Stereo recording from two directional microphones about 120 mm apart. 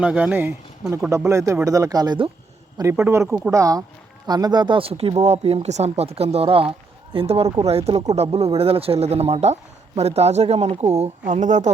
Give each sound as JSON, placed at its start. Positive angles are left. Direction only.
{"t": 0.0, "sound": "speech", "side_deg": -10}
{"t": 11.3, "sound": "speech", "side_deg": -90}